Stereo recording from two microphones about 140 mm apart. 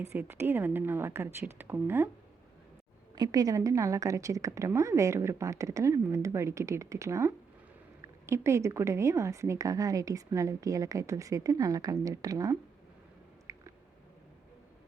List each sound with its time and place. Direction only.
0.0 s a woman's voice: 15° right (ahead or behind)
3.2 s a woman's voice: 25° right (ahead or behind)
13.5 s a sound: 20° right (ahead or behind)